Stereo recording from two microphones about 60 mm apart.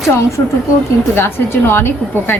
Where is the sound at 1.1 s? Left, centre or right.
Left.